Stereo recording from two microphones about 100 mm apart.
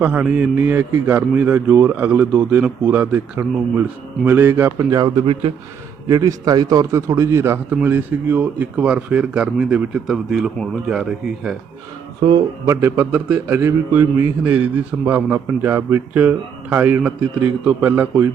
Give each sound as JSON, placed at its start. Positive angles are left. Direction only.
{"t": 0.0, "sound": "a man's voice", "side_deg": -15}
{"t": 5.2, "sound": "a man's voice", "side_deg": -60}
{"t": 6.1, "sound": "a man's voice", "side_deg": -35}
{"t": 12.6, "sound": "speech", "side_deg": -30}
{"t": 13.0, "sound": "a man's voice", "side_deg": -15}